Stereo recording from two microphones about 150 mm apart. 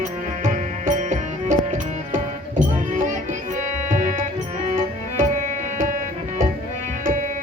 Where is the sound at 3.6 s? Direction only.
55° right (ahead or behind).